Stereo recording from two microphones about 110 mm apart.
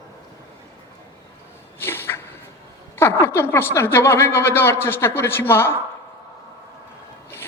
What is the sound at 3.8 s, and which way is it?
A man's voice, 25° left (ahead or behind).